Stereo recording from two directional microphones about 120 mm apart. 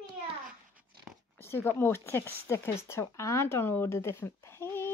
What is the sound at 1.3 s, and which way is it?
Speech, 20° left (ahead or behind).